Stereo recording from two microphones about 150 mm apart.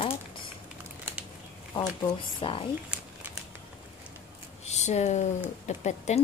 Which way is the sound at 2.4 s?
35° left (ahead or behind).